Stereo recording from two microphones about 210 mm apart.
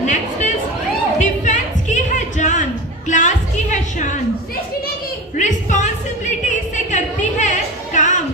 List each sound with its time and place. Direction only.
0.0 s chatter: 35° left (ahead or behind)
1.2 s music: 35° left (ahead or behind)
3.1 s a sound: 35° left (ahead or behind)
5.3 s music: 35° left (ahead or behind)